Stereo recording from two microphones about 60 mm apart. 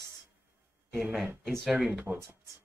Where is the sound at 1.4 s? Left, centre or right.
Centre.